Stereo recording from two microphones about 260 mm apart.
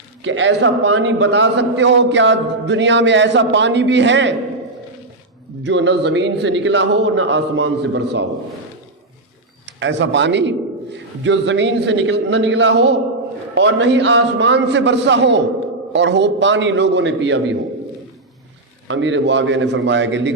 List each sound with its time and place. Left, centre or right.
0.2 s a man's voice: right
5.6 s a man's voice: right
9.6 s a man's voice: right
18.9 s a man's voice: right